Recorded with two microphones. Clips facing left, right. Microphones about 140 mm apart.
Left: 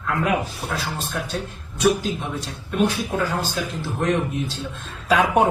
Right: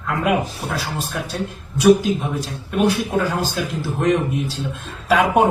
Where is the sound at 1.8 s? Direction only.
10° right (ahead or behind).